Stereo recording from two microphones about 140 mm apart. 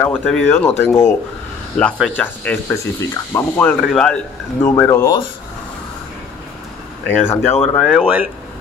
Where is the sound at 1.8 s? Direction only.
10° left (ahead or behind).